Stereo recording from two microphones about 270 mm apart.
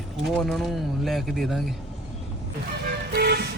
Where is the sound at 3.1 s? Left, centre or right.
Right.